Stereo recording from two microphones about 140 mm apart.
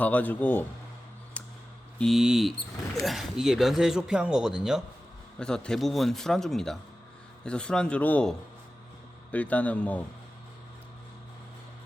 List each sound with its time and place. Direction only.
0.0 s a man's voice: 10° left (ahead or behind)
2.0 s a man's voice: centre (ahead or behind)